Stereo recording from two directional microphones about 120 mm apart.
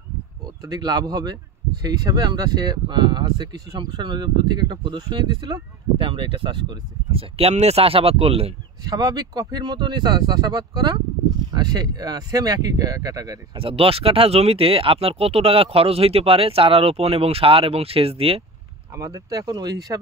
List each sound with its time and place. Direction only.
0.7 s speech: 35° right (ahead or behind); by 8.5 s 55° right (ahead or behind)
8.8 s speech: 35° right (ahead or behind)
13.6 s speech: 50° right (ahead or behind)
18.9 s speech: 30° right (ahead or behind)